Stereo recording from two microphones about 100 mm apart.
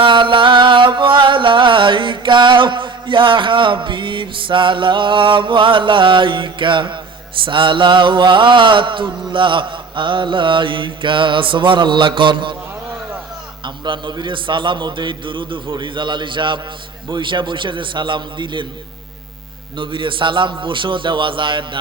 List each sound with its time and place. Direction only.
0.0 s music: 55° right (ahead or behind)
13.7 s a man's voice: 50° right (ahead or behind)
19.7 s a man's voice: 55° right (ahead or behind)